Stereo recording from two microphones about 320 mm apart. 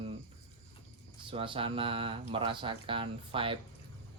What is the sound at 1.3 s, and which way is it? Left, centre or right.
Speech, centre.